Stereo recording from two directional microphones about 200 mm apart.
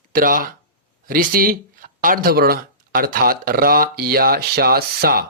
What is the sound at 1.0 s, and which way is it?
Speech, 45° right (ahead or behind).